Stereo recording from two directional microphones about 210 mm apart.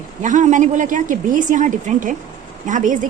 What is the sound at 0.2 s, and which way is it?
A woman's voice, 35° right (ahead or behind).